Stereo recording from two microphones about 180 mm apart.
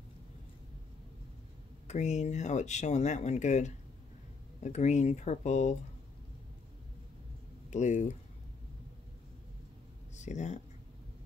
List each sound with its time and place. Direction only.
1.9 s speech: 40° left (ahead or behind)
7.7 s speech: 40° left (ahead or behind)
10.1 s speech: 40° left (ahead or behind)